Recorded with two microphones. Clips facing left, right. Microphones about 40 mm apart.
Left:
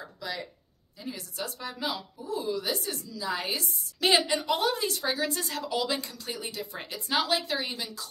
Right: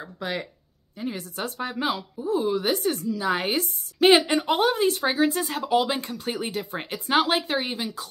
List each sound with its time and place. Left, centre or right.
0.2 s speech: right